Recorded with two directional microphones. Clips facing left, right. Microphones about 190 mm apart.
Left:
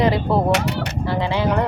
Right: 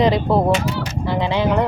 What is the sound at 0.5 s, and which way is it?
Speech, 65° left (ahead or behind).